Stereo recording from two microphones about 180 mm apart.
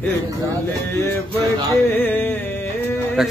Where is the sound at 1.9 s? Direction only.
10° left (ahead or behind).